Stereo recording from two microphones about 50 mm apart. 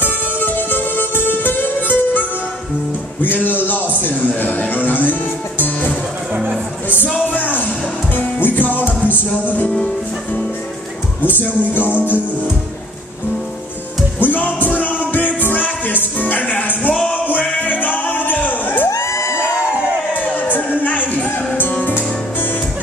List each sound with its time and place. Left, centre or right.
0.0 s music: left
3.2 s a man's voice: left
5.6 s music: left
6.3 s music: right
7.3 s music: left
11.2 s a man's voice: left
14.2 s music: left
17.4 s music: centre
17.6 s music: left
18.9 s crowd: left
19.4 s crowd: centre
20.2 s music: left